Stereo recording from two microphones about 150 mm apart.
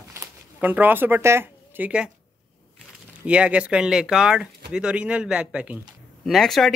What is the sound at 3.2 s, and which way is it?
Speech, 10° right (ahead or behind).